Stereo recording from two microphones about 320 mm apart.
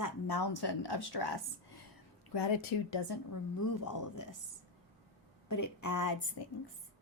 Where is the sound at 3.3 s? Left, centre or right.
Left.